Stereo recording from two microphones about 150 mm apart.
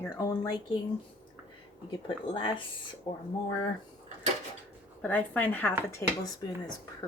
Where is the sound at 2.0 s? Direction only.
35° left (ahead or behind).